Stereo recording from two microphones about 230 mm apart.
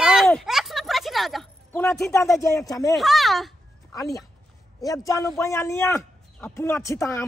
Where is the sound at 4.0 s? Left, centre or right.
Centre.